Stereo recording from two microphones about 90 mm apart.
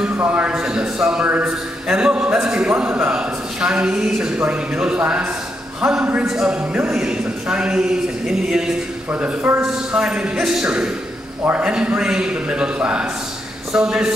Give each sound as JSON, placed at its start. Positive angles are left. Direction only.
{"t": 0.2, "sound": "a man's voice", "side_deg": -15}
{"t": 9.1, "sound": "speech", "side_deg": -20}
{"t": 9.6, "sound": "a man's voice", "side_deg": -10}